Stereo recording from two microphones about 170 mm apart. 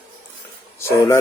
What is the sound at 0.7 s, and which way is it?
Speech, 15° left (ahead or behind).